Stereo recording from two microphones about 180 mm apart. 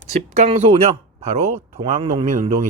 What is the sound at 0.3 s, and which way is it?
Speech, 40° right (ahead or behind).